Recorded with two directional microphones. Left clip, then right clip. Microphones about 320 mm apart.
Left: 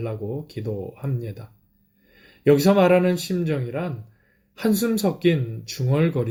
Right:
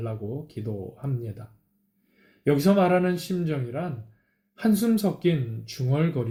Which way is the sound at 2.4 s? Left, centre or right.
Left.